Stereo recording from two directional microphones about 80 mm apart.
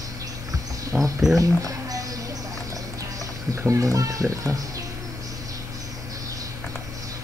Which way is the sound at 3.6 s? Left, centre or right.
Right.